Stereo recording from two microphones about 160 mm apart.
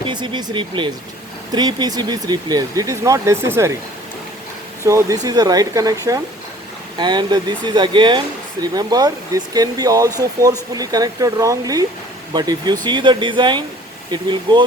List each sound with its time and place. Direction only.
0.0 s speech: 30° right (ahead or behind)
4.8 s speech: 20° right (ahead or behind)